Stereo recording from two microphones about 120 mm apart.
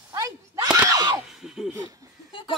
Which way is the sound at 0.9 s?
35° right (ahead or behind).